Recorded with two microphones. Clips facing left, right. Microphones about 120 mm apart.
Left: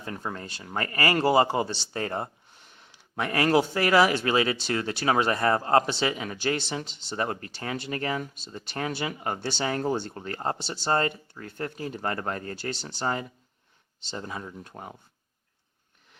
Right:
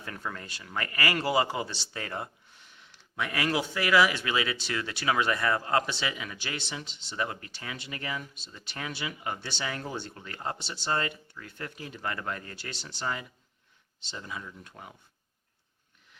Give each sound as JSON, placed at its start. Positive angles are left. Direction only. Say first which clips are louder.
{"t": 0.0, "sound": "speech", "louder": "left 4 dB", "side_deg": 30}